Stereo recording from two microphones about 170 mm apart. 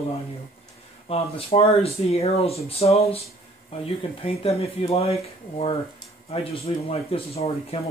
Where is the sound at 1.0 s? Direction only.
35° left (ahead or behind).